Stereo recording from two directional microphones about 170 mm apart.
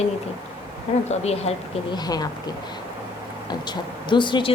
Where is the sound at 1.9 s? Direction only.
25° left (ahead or behind).